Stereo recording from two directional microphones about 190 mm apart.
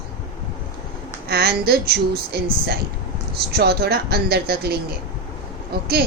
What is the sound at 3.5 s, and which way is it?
A man's voice, 55° right (ahead or behind).